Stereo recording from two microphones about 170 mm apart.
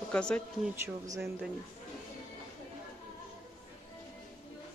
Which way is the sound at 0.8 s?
15° right (ahead or behind).